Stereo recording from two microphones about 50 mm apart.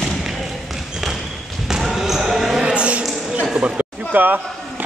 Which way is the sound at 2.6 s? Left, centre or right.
Right.